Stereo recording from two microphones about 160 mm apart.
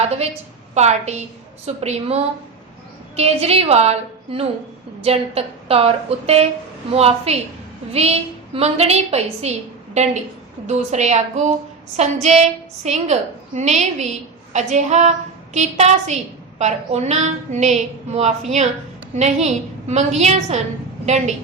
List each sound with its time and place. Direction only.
0.7 s a woman's voice: 45° right (ahead or behind)